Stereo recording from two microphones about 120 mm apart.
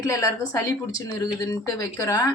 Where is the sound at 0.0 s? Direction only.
30° left (ahead or behind).